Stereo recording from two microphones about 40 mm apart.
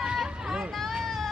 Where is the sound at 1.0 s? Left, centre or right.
Centre.